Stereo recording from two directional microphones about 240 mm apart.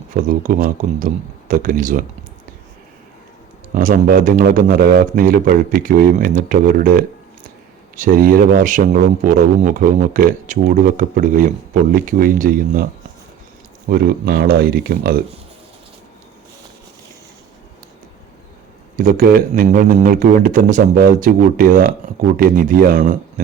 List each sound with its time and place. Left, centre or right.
0.1 s a man's voice: right
3.8 s a man's voice: right
18.9 s a man's voice: right